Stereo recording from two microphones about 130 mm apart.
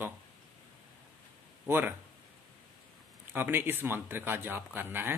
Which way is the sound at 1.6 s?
15° right (ahead or behind).